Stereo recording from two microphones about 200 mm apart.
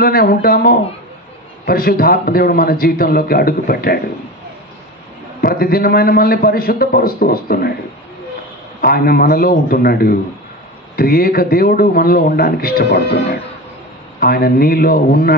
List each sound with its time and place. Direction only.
0.0 s a man's voice: 50° left (ahead or behind)
5.4 s a man's voice: 45° left (ahead or behind)
8.8 s a man's voice: 45° left (ahead or behind)